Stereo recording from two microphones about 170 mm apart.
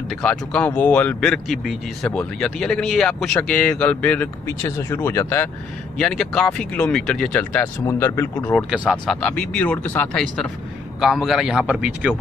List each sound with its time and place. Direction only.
0.1 s speech: 5° left (ahead or behind)
8.5 s speech: 5° right (ahead or behind)